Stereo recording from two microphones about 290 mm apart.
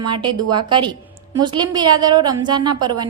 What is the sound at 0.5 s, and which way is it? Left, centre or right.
A woman's voice, centre.